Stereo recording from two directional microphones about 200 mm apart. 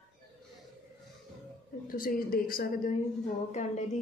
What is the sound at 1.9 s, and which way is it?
A woman's voice, 45° left (ahead or behind).